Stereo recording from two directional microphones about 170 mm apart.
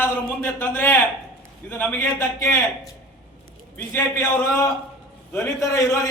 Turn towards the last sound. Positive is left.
turn(degrees=20)  # may be behind; listen again after turning